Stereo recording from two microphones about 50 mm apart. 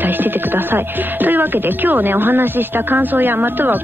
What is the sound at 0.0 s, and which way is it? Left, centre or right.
Speech, right.